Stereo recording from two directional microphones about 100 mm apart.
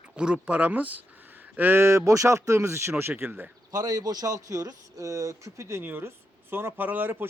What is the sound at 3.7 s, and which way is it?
Speech, 40° right (ahead or behind).